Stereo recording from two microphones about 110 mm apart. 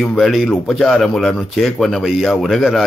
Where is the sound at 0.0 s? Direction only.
Centre (ahead or behind).